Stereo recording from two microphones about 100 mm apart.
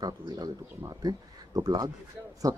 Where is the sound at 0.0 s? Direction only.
40° right (ahead or behind).